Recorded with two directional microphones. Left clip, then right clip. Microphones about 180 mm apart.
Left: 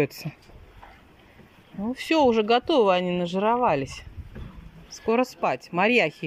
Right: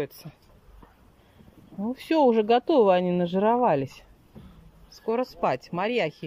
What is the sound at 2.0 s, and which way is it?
Speech, 15° right (ahead or behind).